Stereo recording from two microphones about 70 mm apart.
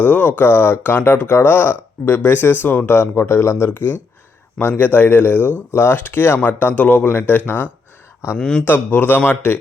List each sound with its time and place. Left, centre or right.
0.0 s speech: left
8.4 s speech: centre
8.6 s speech: left